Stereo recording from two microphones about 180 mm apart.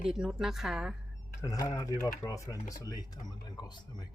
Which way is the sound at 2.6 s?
45° left (ahead or behind).